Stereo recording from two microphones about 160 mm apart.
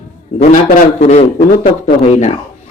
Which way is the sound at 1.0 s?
45° left (ahead or behind).